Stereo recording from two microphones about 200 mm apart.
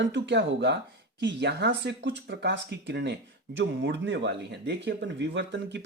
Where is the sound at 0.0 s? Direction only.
65° right (ahead or behind).